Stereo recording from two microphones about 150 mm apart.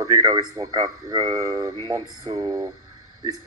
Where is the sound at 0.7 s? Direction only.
25° right (ahead or behind).